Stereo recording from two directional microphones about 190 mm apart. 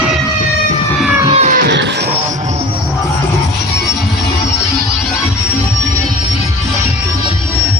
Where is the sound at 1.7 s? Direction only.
65° right (ahead or behind).